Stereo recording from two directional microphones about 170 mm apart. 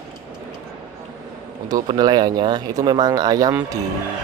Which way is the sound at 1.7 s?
25° right (ahead or behind).